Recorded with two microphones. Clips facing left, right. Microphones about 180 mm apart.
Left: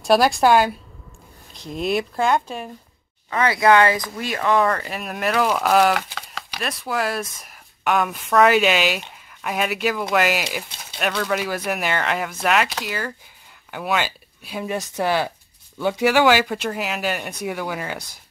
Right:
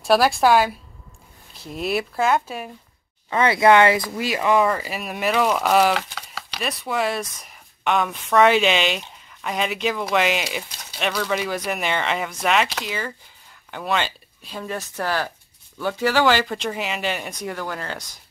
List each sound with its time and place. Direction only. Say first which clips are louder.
0.0 s speech: left 1 dB; centre (ahead or behind)
3.3 s speech: right 1 dB; 25° right (ahead or behind)
4.2 s speech: even; 10° right (ahead or behind); by 18.0 s 10° left (ahead or behind)